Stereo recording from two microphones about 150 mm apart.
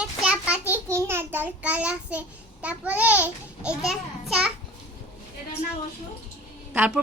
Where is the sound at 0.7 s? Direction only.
15° right (ahead or behind).